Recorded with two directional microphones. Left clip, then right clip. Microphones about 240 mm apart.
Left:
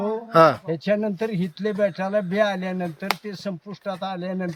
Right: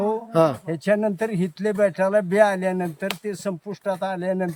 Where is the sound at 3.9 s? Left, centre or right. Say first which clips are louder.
Right 4 dB; centre.